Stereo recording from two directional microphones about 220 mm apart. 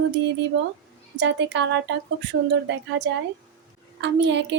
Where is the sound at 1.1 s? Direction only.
55° right (ahead or behind).